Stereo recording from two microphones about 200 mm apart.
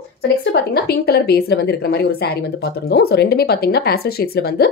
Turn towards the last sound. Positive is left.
turn(degrees=50)  # may be behind; listen again after turning